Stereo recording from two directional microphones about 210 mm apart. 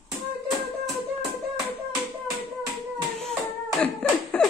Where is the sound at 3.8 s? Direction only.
5° left (ahead or behind).